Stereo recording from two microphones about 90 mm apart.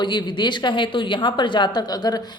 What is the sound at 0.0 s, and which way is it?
A woman's voice, 60° left (ahead or behind).